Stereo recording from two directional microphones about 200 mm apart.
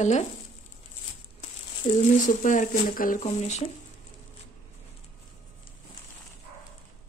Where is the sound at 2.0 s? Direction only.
40° left (ahead or behind).